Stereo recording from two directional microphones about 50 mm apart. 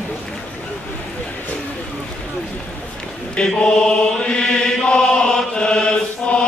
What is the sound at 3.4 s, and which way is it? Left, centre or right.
Chant, centre.